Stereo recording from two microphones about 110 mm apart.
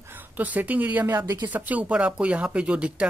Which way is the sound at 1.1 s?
30° right (ahead or behind).